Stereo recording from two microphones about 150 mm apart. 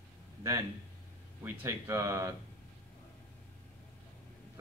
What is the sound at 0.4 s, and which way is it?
Speech, 20° right (ahead or behind).